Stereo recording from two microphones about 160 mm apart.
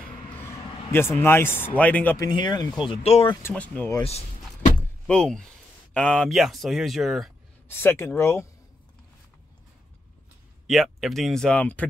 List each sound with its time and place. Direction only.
0.3 s a sound: 15° left (ahead or behind)
0.9 s speech: 15° left (ahead or behind)
2.1 s speech: 25° left (ahead or behind)
2.9 s speech: 40° left (ahead or behind)
3.4 s speech: 10° left (ahead or behind)
4.0 s speech: 40° left (ahead or behind)
5.0 s speech: 5° left (ahead or behind)
7.6 s speech: 15° left (ahead or behind)
10.7 s speech: centre (ahead or behind)